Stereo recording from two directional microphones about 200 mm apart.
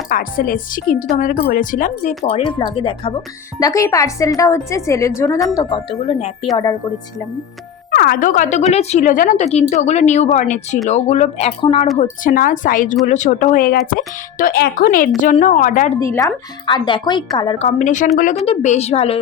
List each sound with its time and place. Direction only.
0.1 s speech: 45° left (ahead or behind)
2.4 s speech: 25° left (ahead or behind)
3.6 s speech: 15° left (ahead or behind)
5.9 s speech: 30° left (ahead or behind)
7.9 s speech: 50° left (ahead or behind); by 11.9 s 30° left (ahead or behind)
11.9 s speech: 45° left (ahead or behind)
16.0 s speech: 15° left (ahead or behind)